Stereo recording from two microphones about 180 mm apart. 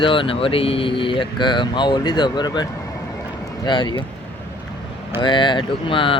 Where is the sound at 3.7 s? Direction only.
25° left (ahead or behind).